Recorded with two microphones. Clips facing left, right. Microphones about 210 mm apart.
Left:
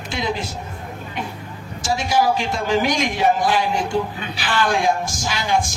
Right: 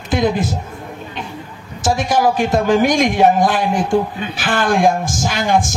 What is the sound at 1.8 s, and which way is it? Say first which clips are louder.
A man's voice: right 4 dB; 50° right (ahead or behind).